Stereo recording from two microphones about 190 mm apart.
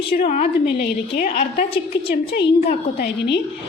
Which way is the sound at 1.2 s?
50° left (ahead or behind).